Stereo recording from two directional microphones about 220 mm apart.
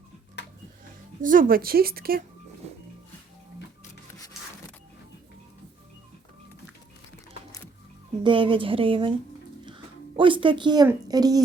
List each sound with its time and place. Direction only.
0.4 s tick-tock: 50° left (ahead or behind)
1.2 s speech: 40° right (ahead or behind)
8.2 s a woman's voice: 25° right (ahead or behind)
9.6 s a sound: 20° right (ahead or behind)
10.8 s a woman's voice: 15° right (ahead or behind)